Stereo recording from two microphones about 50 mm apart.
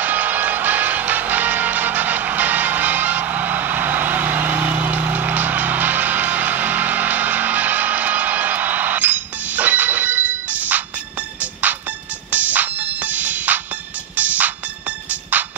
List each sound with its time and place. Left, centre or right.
0.0 s music: right